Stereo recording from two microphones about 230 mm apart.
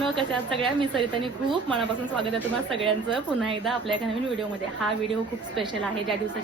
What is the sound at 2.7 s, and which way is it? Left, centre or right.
Speech, right.